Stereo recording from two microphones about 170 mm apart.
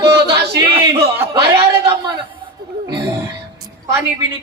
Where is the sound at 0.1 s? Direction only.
25° right (ahead or behind).